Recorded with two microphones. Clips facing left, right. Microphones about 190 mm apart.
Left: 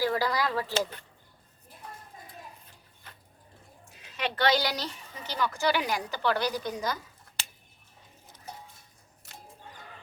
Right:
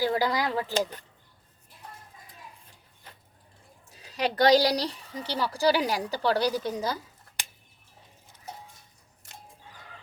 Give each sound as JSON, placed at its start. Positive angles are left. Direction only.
{"t": 0.0, "sound": "speech", "side_deg": -20}
{"t": 3.9, "sound": "speech", "side_deg": -35}